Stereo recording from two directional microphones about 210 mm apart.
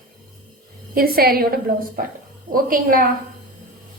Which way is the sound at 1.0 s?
45° right (ahead or behind).